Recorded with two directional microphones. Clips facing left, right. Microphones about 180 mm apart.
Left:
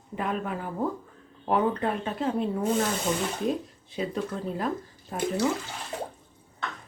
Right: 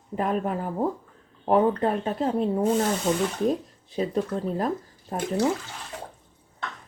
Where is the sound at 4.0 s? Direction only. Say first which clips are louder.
Right 4 dB; 40° right (ahead or behind).